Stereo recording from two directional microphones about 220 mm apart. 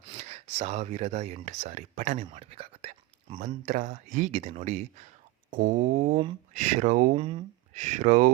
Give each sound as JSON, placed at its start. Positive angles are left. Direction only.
{"t": 0.0, "sound": "speech", "side_deg": -30}